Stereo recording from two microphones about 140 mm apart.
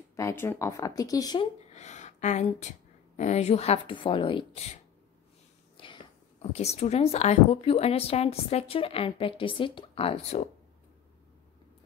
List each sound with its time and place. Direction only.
0.1 s speech: 20° left (ahead or behind)
1.7 s a sound: 55° left (ahead or behind)
3.2 s a woman's voice: 55° left (ahead or behind); by 4.6 s 40° left (ahead or behind)
6.5 s a woman's voice: 50° left (ahead or behind)